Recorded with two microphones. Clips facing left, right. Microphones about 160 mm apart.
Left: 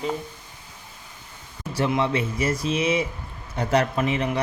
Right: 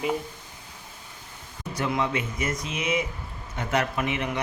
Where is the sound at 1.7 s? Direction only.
30° left (ahead or behind).